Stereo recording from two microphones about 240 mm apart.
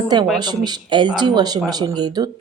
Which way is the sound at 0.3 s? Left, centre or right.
Centre.